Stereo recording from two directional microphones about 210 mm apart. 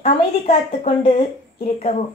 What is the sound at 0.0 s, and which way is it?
A woman's voice, 30° left (ahead or behind).